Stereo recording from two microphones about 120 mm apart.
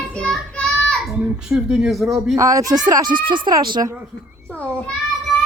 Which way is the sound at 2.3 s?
30° right (ahead or behind).